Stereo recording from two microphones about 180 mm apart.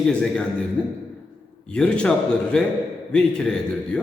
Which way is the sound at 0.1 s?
5° left (ahead or behind).